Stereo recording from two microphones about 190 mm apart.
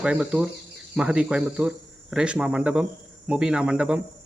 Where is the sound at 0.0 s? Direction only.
5° right (ahead or behind).